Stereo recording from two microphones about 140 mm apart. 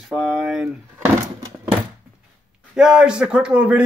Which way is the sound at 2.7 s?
5° right (ahead or behind).